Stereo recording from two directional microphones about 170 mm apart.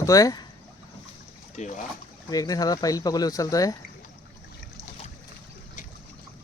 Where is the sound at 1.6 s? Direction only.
45° left (ahead or behind).